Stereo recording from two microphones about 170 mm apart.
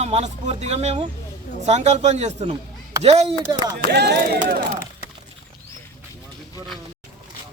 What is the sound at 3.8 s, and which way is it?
Speech, 75° right (ahead or behind).